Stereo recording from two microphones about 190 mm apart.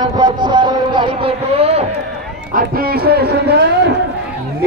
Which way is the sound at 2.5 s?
50° right (ahead or behind).